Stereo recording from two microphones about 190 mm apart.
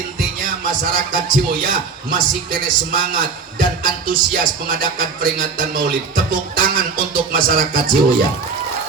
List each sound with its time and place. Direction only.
0.4 s a man's voice: 45° right (ahead or behind)